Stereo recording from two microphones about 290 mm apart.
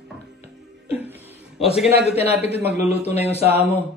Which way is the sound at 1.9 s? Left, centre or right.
Right.